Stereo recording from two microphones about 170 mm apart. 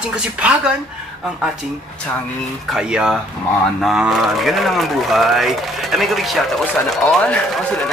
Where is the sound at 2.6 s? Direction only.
5° right (ahead or behind).